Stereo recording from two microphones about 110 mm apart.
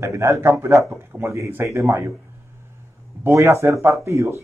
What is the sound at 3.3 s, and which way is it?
A man's voice, 25° right (ahead or behind).